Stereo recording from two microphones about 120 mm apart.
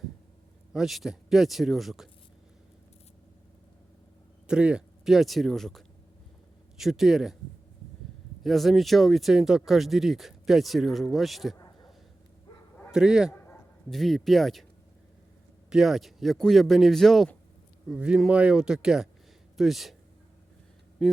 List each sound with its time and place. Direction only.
0.7 s speech: 5° right (ahead or behind)
4.4 s speech: 10° right (ahead or behind)
8.4 s speech: centre (ahead or behind)
11.5 s a sound: 30° left (ahead or behind)
12.9 s speech: 5° right (ahead or behind)
15.7 s speech: 5° right (ahead or behind)
17.8 s speech: 10° right (ahead or behind)
21.0 s speech: centre (ahead or behind)